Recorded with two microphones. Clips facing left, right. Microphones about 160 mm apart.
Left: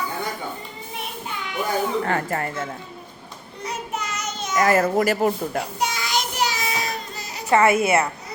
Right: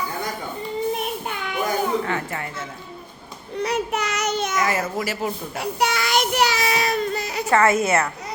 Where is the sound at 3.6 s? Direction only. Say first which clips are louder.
Right 6 dB; 70° right (ahead or behind).